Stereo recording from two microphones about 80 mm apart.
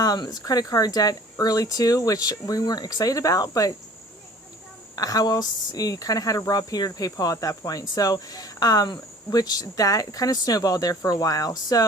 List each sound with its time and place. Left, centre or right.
0.0 s speech: left
4.9 s speech: left